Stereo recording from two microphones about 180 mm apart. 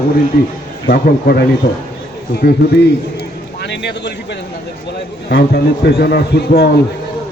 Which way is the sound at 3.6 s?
70° left (ahead or behind).